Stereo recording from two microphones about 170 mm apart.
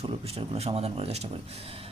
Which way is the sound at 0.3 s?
35° right (ahead or behind).